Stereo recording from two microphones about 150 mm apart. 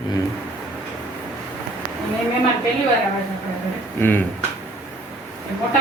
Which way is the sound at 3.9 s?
15° left (ahead or behind).